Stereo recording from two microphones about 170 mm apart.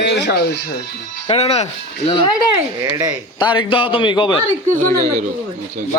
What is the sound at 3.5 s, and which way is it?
Speech, 30° left (ahead or behind).